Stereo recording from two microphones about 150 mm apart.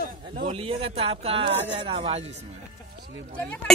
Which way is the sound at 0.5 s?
40° right (ahead or behind).